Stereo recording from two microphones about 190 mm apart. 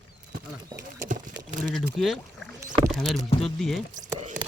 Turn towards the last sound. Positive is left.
turn(degrees=-40)  # may be behind; listen again after turning